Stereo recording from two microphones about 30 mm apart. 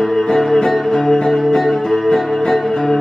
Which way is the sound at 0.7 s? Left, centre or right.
Centre.